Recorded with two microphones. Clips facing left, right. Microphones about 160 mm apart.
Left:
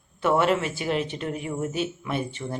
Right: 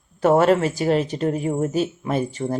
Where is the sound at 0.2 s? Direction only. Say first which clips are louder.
Right 6 dB; 40° right (ahead or behind).